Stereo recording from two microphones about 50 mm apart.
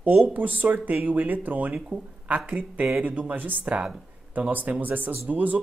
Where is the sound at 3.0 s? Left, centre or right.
Right.